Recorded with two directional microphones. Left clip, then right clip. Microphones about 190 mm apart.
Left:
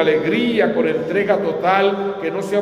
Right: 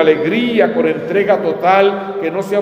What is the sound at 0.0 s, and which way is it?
A man's voice, 30° right (ahead or behind).